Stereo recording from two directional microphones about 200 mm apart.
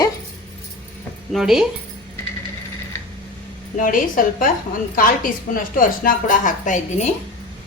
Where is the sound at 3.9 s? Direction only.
45° left (ahead or behind).